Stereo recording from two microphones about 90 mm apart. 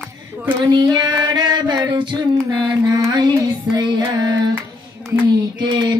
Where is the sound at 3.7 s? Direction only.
45° right (ahead or behind).